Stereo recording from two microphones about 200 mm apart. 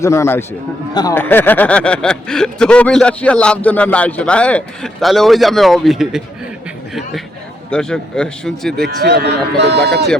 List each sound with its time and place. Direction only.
0.0 s a man's voice: 15° left (ahead or behind); by 6.2 s centre (ahead or behind)
7.7 s speech: 5° left (ahead or behind)
8.8 s speech: 55° right (ahead or behind)